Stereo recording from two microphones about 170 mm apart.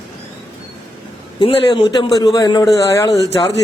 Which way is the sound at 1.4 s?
30° left (ahead or behind).